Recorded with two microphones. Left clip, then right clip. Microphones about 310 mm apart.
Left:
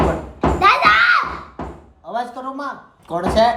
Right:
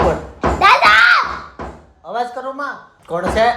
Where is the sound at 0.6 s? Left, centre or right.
Right.